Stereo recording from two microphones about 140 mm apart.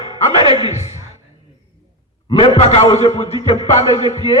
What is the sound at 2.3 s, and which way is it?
A man's voice, 40° left (ahead or behind).